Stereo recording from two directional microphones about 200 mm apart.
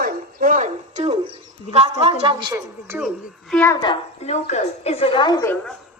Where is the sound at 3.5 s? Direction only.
10° left (ahead or behind).